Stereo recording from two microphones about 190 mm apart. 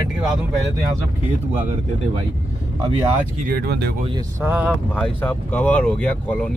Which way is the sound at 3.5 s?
55° right (ahead or behind).